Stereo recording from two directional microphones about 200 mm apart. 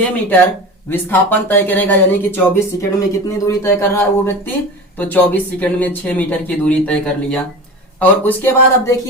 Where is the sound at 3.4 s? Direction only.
15° left (ahead or behind).